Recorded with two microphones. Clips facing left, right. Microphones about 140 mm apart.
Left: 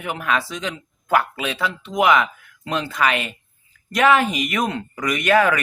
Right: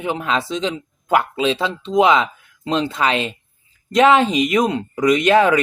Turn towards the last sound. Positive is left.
turn(degrees=-20)  # may be behind; listen again after turning